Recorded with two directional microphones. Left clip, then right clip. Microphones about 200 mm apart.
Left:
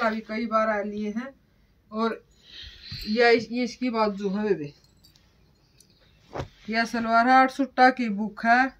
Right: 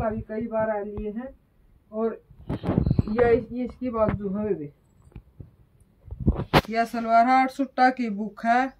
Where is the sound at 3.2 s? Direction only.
20° left (ahead or behind); by 4.5 s centre (ahead or behind).